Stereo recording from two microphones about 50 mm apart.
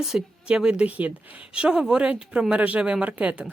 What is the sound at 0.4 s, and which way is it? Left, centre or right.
A woman's voice, centre.